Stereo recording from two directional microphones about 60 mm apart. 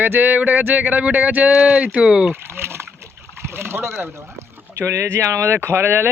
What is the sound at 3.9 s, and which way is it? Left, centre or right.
Speech, right.